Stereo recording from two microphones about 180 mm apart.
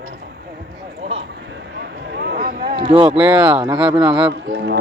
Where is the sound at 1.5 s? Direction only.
70° right (ahead or behind); by 2.7 s 55° right (ahead or behind).